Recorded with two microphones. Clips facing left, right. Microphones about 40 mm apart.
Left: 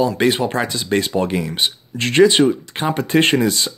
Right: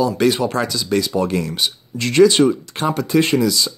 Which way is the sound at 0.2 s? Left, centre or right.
Left.